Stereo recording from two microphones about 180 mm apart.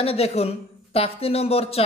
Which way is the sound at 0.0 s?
35° left (ahead or behind).